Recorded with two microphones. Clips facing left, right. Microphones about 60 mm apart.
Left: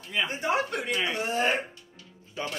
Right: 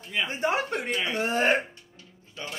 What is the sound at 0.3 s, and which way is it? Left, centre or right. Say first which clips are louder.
Speech: right 2 dB; right.